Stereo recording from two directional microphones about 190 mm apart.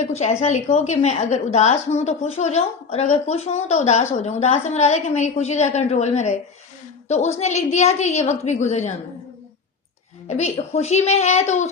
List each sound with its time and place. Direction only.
0.0 s a woman's voice: 35° left (ahead or behind)
10.2 s a woman's voice: 35° left (ahead or behind)